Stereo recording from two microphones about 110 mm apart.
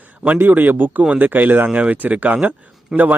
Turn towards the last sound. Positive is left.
turn(degrees=0)  # may be behind; listen again after turning